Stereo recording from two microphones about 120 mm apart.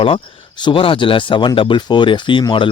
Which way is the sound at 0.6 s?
45° left (ahead or behind).